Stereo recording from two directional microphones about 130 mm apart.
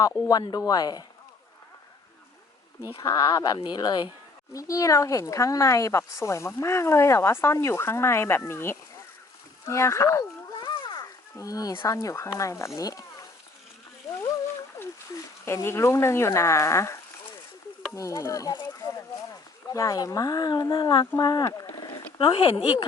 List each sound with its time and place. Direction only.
0.3 s speech: 30° left (ahead or behind)
3.0 s speech: 25° left (ahead or behind)
10.5 s speech: 35° left (ahead or behind)
14.8 s speech: 25° left (ahead or behind)
22.2 s speech: 45° left (ahead or behind)